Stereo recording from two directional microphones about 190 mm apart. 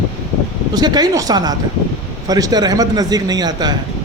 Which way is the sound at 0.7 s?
20° right (ahead or behind).